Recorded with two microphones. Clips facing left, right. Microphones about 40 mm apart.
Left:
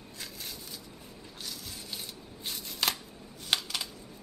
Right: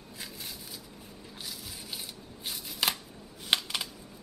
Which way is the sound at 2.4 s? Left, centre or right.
Centre.